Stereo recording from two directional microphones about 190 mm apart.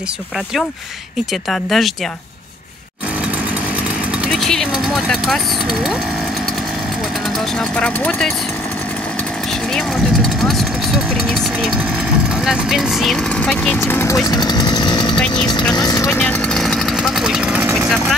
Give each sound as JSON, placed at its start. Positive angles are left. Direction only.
{"t": 1.5, "sound": "speech", "side_deg": 0}
{"t": 4.4, "sound": "vehicle", "side_deg": 0}
{"t": 5.3, "sound": "speech", "side_deg": 0}
{"t": 7.8, "sound": "speech", "side_deg": 5}
{"t": 12.4, "sound": "speech", "side_deg": 0}
{"t": 15.1, "sound": "speech", "side_deg": 5}
{"t": 15.7, "sound": "speech", "side_deg": 20}
{"t": 16.1, "sound": "a sound", "side_deg": 5}